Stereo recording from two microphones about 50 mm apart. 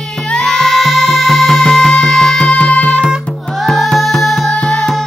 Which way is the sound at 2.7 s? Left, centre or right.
Left.